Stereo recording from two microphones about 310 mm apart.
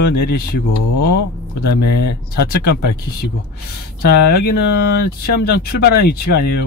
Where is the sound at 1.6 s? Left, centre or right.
Left.